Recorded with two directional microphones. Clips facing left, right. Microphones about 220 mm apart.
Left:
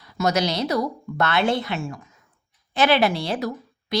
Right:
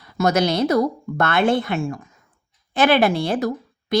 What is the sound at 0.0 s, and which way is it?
A woman's voice, 55° right (ahead or behind).